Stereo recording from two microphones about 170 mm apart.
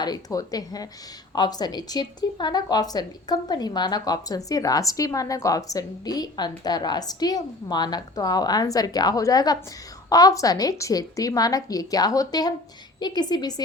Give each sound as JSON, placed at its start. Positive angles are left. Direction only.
{"t": 0.0, "sound": "speech", "side_deg": 20}